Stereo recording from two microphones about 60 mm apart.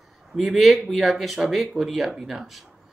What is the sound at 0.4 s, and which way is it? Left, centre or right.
Speech, centre.